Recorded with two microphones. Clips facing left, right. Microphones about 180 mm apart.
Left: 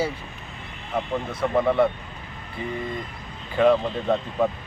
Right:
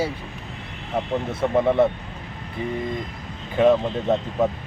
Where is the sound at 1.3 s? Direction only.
20° right (ahead or behind).